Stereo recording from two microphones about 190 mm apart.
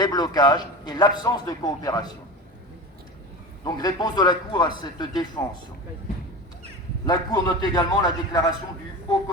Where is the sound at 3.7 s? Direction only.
20° left (ahead or behind).